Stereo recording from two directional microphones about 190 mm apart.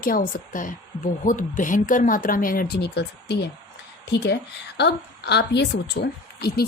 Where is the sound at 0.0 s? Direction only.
50° left (ahead or behind).